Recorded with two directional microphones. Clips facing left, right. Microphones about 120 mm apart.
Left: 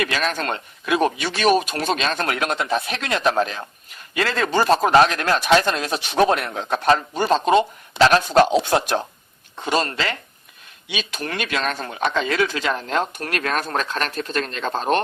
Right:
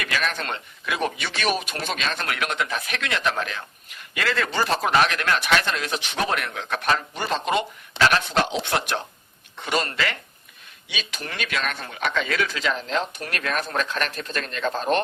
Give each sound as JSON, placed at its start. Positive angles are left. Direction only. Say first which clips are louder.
{"t": 0.0, "sound": "speech", "louder": "left 4 dB", "side_deg": 35}
{"t": 10.9, "sound": "speech", "louder": "left 6 dB", "side_deg": 45}